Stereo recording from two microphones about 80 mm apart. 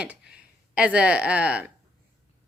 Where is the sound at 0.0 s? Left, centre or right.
Centre.